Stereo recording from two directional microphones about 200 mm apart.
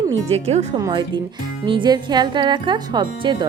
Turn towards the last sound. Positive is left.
turn(degrees=-20)  # may be behind; listen again after turning